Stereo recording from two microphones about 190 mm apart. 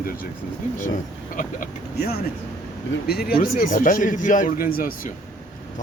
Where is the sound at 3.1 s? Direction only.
55° left (ahead or behind).